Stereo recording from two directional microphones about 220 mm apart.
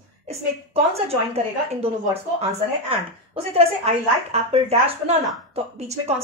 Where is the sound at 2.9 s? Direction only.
25° right (ahead or behind).